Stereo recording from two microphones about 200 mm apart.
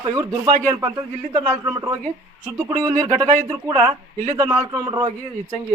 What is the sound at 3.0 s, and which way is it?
Speech, 20° right (ahead or behind).